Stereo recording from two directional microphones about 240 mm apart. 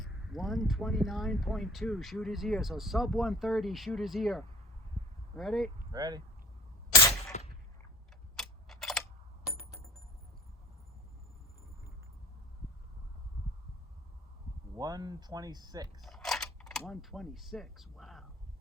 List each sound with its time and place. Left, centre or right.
0.0 s speech: centre
5.9 s speech: centre
7.3 s a sound: left
8.4 s typewriter: centre
14.8 s speech: centre
16.0 s a sound: centre